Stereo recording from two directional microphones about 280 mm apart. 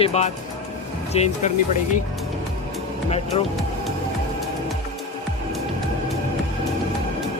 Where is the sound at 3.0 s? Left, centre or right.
Left.